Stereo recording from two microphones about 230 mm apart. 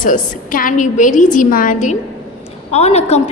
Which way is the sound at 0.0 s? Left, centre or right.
Left.